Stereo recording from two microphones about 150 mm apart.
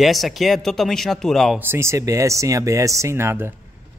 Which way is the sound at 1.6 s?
15° right (ahead or behind).